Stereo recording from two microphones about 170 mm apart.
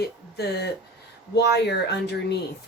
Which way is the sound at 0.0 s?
75° left (ahead or behind).